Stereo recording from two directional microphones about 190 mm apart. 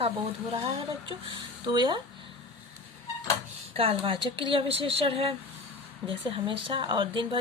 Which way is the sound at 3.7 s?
30° right (ahead or behind).